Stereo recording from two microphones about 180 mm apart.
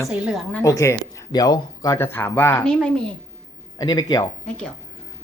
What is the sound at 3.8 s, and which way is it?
Speech, 20° left (ahead or behind).